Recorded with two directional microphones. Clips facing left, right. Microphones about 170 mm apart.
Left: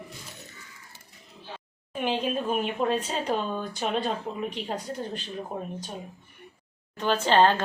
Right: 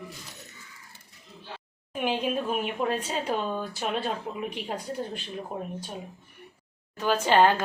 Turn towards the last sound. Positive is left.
turn(degrees=-10)  # may be behind; listen again after turning